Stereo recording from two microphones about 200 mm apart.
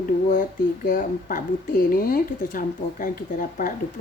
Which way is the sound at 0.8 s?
40° left (ahead or behind).